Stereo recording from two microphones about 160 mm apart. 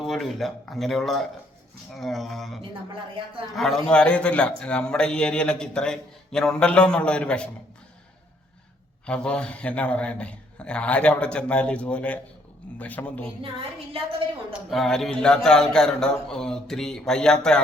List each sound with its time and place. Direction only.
0.0 s a man's voice: centre (ahead or behind)
2.6 s speech: 35° right (ahead or behind)
3.5 s a man's voice: centre (ahead or behind)
9.0 s a man's voice: 5° left (ahead or behind)
13.4 s speech: 35° right (ahead or behind)
14.7 s a man's voice: centre (ahead or behind)